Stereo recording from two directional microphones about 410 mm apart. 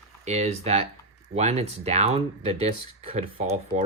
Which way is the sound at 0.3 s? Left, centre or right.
Centre.